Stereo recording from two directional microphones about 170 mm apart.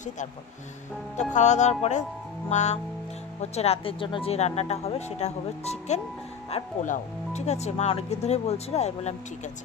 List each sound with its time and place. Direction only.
1.3 s music: 45° left (ahead or behind)
3.3 s speech: 40° left (ahead or behind)